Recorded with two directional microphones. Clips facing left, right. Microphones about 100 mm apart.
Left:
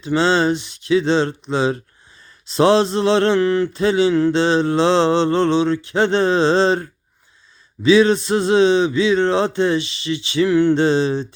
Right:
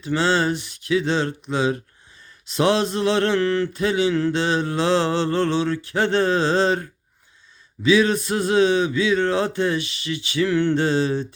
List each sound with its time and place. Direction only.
0.0 s speech: 25° left (ahead or behind)
3.8 s speech: 30° left (ahead or behind)